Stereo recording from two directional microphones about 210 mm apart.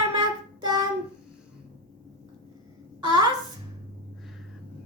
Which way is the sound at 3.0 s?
20° right (ahead or behind).